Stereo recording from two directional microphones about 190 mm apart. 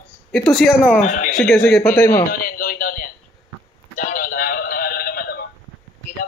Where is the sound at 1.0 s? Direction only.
40° left (ahead or behind).